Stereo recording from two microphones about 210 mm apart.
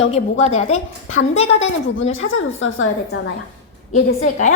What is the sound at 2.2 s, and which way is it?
Speech, 70° left (ahead or behind).